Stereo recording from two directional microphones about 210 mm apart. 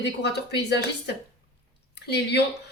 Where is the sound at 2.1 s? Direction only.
50° left (ahead or behind).